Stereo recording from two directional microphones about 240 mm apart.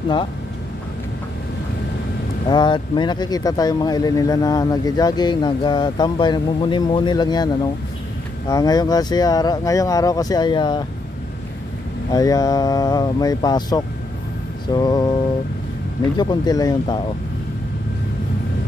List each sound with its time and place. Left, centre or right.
2.4 s speech: centre
12.1 s speech: centre
16.2 s speech: centre